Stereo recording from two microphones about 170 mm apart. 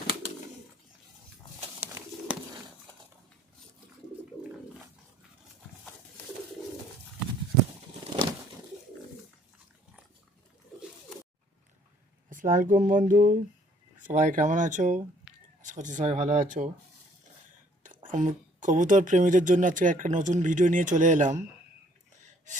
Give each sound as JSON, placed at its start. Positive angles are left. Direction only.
{"t": 1.8, "sound": "bird", "side_deg": -15}
{"t": 12.3, "sound": "a woman's voice", "side_deg": -50}
{"t": 15.3, "sound": "a sound", "side_deg": -5}
{"t": 15.6, "sound": "a woman's voice", "side_deg": -50}
{"t": 17.8, "sound": "a woman's voice", "side_deg": -50}